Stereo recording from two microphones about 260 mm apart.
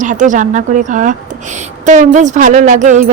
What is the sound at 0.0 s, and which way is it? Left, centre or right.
A woman's voice, right.